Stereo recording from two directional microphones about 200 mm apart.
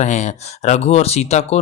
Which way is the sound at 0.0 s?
35° left (ahead or behind).